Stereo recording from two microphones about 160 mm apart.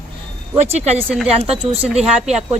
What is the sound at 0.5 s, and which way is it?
Speech, 40° right (ahead or behind).